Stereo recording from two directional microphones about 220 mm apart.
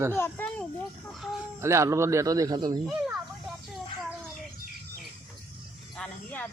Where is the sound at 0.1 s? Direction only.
10° left (ahead or behind).